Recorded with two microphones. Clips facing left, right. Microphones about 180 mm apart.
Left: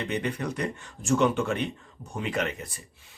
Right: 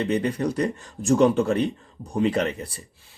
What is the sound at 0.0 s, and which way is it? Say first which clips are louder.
Speech: right 6 dB; 35° right (ahead or behind).